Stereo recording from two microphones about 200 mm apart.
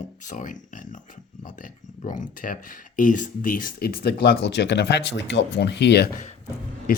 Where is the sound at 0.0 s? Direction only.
40° left (ahead or behind).